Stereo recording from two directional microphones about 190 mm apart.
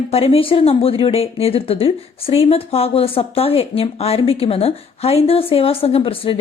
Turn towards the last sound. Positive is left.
turn(degrees=30)  # may be behind; listen again after turning